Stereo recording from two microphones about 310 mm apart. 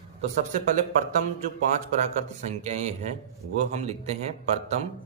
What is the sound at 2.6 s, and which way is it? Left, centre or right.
Speech, right.